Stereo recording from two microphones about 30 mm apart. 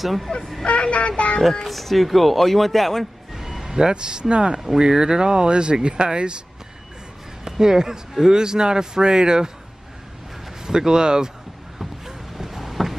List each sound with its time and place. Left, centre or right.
0.0 s speech: centre
0.4 s vehicle: centre
0.7 s speech: left
1.7 s speech: centre
3.3 s music: centre
3.7 s speech: right
7.4 s speech: centre
10.6 s speech: right
12.1 s a sound: centre